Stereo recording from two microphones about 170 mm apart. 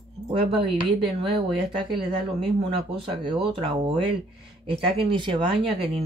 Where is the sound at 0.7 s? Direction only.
Centre (ahead or behind).